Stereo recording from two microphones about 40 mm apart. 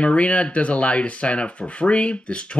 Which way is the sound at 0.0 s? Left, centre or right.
Left.